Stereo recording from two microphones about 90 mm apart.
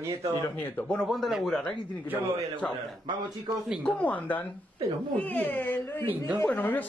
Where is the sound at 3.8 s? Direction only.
15° left (ahead or behind).